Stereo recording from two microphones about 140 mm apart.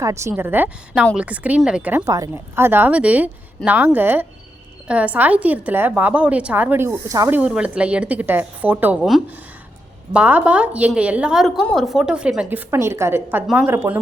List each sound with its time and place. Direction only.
0.0 s speech: 20° right (ahead or behind)
2.0 s speech: 25° right (ahead or behind)